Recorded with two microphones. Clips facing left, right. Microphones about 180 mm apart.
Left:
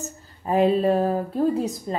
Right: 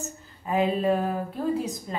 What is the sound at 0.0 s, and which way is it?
A woman's voice, 40° left (ahead or behind).